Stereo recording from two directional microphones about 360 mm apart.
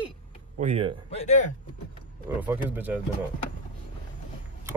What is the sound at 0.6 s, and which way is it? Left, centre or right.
Speech, centre.